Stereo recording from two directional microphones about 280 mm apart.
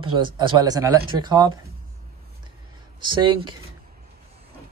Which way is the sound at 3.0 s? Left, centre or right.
Centre.